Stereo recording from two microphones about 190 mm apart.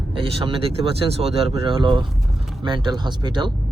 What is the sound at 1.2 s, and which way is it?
Speech, 30° right (ahead or behind).